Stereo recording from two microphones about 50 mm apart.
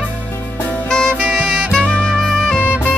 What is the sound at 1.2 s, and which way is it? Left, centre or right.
Saxophone, right.